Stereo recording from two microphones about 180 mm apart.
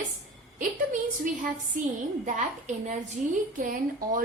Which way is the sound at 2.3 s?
45° right (ahead or behind).